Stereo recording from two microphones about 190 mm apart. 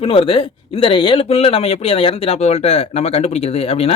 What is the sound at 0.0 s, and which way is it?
Speech, 30° left (ahead or behind).